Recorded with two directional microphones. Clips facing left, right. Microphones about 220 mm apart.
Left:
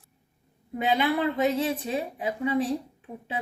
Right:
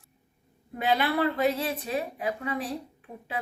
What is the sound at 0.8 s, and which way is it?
A woman's voice, 20° left (ahead or behind).